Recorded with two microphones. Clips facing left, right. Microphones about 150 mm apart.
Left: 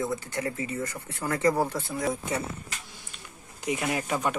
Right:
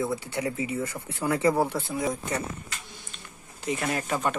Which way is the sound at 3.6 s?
10° left (ahead or behind).